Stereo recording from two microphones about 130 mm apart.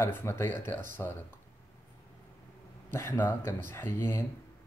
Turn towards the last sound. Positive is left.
turn(degrees=20)  # may be behind; listen again after turning